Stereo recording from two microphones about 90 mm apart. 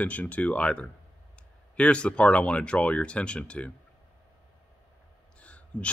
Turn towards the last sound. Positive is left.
turn(degrees=15)  # may be behind; listen again after turning